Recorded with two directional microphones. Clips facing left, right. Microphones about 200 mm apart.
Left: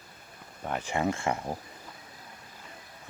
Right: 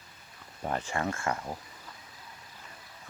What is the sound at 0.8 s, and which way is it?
Speech, 15° left (ahead or behind).